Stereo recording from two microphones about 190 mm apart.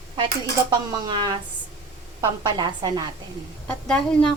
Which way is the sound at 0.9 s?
25° right (ahead or behind).